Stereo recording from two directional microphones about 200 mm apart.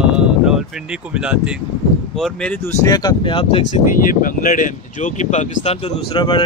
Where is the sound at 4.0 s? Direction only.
45° left (ahead or behind).